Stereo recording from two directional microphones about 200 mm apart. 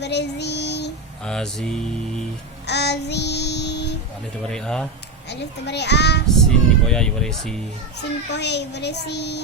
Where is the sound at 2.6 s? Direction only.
55° left (ahead or behind).